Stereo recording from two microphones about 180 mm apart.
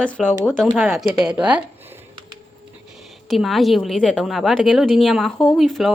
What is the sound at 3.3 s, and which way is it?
A woman's voice, centre (ahead or behind).